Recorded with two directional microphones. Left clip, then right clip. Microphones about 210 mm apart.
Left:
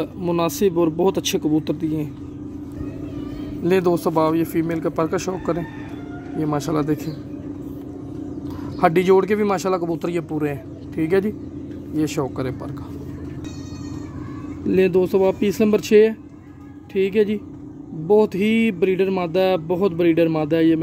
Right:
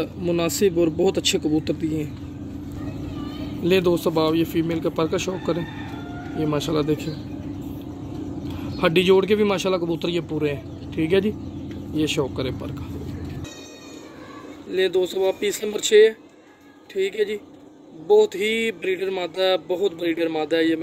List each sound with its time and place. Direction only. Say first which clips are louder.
0.0 s speech: left 2 dB; 35° left (ahead or behind)
3.6 s speech: left 1 dB; 30° left (ahead or behind)
8.7 s a man's voice: left 2 dB; 30° left (ahead or behind)
14.7 s speech: left 4 dB; 30° left (ahead or behind)